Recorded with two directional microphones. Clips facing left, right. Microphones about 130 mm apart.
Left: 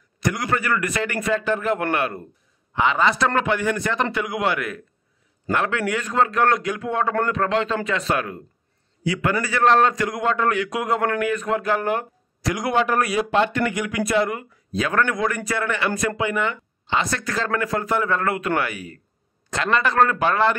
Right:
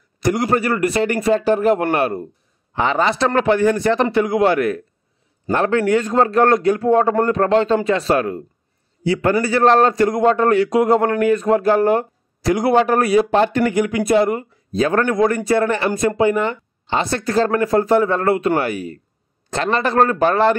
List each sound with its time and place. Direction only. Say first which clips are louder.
0.2 s a man's voice: right 6 dB; 35° right (ahead or behind)